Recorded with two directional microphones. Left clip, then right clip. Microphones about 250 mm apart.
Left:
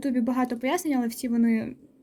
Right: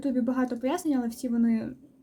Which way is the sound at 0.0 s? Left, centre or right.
Left.